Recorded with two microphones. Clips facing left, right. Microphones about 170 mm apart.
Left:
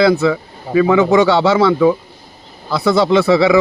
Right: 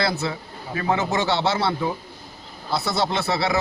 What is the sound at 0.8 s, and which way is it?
Speech, 90° left.